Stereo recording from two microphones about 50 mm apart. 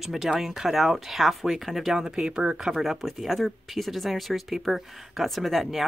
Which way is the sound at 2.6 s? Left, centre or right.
Centre.